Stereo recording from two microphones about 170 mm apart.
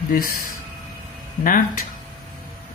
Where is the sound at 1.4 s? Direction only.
50° left (ahead or behind).